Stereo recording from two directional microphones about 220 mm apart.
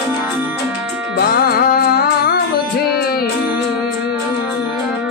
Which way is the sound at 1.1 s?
45° left (ahead or behind).